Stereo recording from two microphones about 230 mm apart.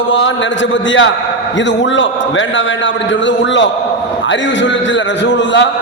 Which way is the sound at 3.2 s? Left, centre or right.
Left.